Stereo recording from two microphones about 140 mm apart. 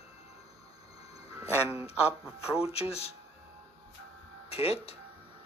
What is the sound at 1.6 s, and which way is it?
Speech, 20° right (ahead or behind).